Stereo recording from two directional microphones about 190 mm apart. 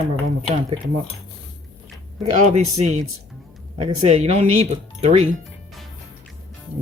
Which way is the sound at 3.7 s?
35° right (ahead or behind).